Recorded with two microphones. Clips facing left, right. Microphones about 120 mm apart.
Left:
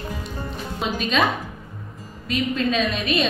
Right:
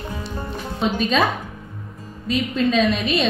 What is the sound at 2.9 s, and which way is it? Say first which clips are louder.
Speech: right 2 dB; 35° right (ahead or behind).